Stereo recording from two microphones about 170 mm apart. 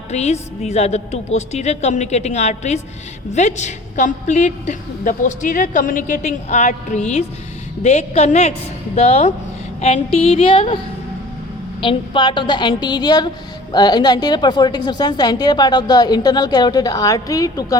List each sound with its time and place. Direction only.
0.1 s a woman's voice: 40° left (ahead or behind)
11.8 s a woman's voice: 30° left (ahead or behind)